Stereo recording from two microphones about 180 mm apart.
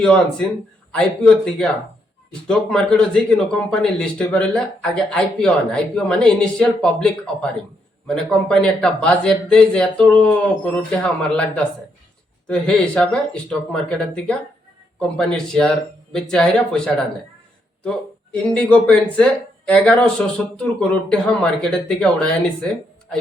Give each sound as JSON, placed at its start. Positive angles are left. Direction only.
{"t": 0.0, "sound": "speech", "side_deg": 5}